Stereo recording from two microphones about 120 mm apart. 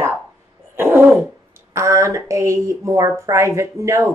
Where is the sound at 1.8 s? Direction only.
25° right (ahead or behind).